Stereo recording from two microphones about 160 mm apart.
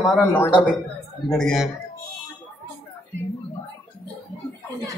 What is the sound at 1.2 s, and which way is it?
Speech, 5° left (ahead or behind).